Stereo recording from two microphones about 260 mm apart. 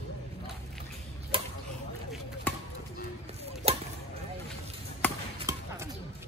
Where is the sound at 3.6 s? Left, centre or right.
Right.